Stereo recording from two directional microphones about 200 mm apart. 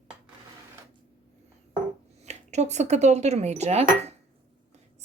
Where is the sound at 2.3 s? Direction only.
35° right (ahead or behind).